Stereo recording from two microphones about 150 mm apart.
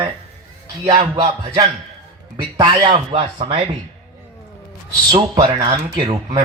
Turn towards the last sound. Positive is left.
turn(degrees=-25)  # may be behind; listen again after turning